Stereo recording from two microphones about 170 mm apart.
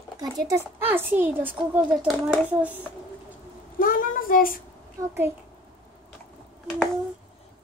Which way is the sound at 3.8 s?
55° left (ahead or behind).